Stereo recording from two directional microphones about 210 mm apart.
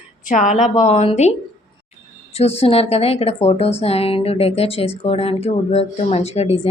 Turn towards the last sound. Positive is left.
turn(degrees=30)  # may be behind; listen again after turning